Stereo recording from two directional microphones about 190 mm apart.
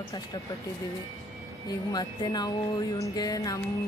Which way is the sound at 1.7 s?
20° left (ahead or behind).